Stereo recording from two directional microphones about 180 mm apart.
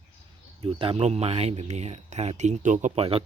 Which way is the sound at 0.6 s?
30° right (ahead or behind).